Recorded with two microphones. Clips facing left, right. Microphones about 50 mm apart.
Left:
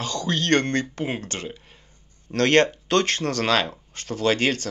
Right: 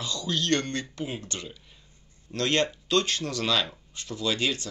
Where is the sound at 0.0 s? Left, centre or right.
Left.